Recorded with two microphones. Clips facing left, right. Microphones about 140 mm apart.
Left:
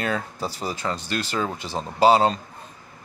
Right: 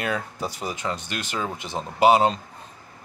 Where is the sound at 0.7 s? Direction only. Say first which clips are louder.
Left 2 dB; 20° right (ahead or behind).